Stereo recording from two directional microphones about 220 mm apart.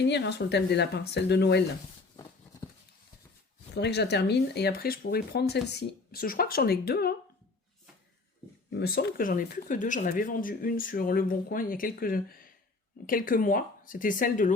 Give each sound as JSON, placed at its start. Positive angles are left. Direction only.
{"t": 0.0, "sound": "speech", "side_deg": 50}
{"t": 3.8, "sound": "speech", "side_deg": 50}
{"t": 8.8, "sound": "speech", "side_deg": 45}